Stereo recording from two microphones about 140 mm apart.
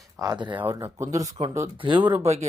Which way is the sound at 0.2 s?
30° right (ahead or behind).